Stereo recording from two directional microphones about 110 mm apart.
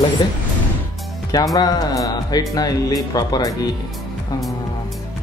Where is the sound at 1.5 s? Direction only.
35° left (ahead or behind).